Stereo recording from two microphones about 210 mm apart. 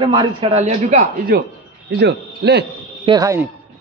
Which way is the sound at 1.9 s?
55° right (ahead or behind).